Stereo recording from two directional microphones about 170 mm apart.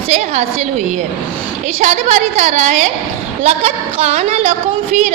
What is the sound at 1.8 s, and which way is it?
A woman's voice, 45° right (ahead or behind).